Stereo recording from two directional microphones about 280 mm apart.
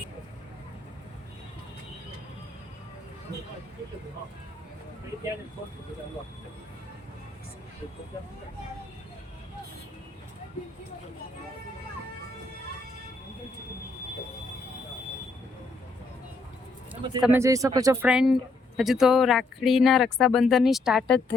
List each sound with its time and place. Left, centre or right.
16.9 s speech: centre